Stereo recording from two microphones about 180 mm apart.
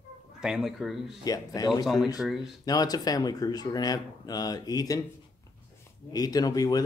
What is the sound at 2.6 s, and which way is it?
Speech, 20° left (ahead or behind).